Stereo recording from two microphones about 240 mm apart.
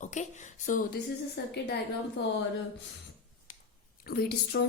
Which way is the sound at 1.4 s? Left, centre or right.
Left.